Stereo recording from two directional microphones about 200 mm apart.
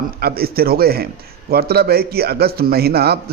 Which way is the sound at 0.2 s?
50° right (ahead or behind).